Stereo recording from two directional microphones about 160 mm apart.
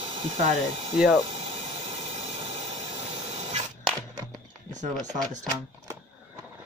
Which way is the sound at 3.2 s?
45° right (ahead or behind).